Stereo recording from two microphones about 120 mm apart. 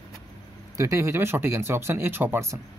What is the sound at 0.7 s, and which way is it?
Speech, 25° right (ahead or behind).